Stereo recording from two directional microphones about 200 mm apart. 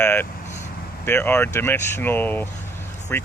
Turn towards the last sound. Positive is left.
turn(degrees=10)  # may be behind; listen again after turning